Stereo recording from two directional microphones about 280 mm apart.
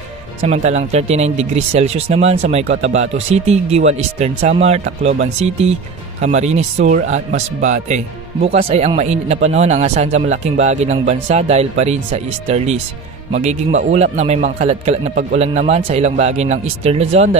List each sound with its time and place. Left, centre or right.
0.4 s speech: right